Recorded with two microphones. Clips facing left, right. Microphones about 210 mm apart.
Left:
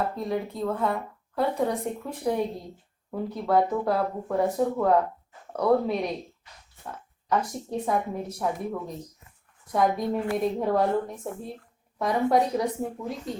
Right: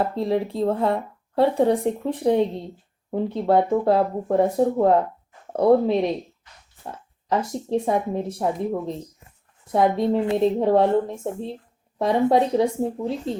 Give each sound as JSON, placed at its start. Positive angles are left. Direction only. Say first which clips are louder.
{"t": 0.2, "sound": "speech", "louder": "right 6 dB", "side_deg": -30}